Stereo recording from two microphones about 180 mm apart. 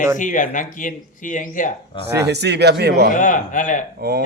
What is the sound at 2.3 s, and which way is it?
Speech, 70° right (ahead or behind).